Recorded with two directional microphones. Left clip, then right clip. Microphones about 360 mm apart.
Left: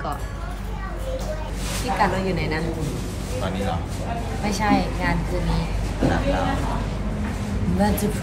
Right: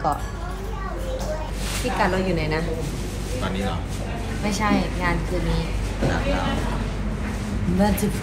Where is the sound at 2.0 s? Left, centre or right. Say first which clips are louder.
Even; centre.